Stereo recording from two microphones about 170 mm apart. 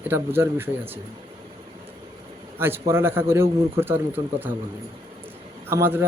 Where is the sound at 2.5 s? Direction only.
15° right (ahead or behind).